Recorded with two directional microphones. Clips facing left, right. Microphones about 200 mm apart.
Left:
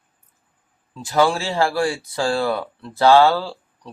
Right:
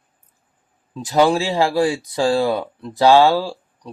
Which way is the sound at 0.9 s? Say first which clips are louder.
Right 3 dB; 20° right (ahead or behind).